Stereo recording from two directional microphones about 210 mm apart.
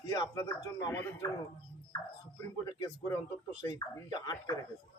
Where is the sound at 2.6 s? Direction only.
20° left (ahead or behind).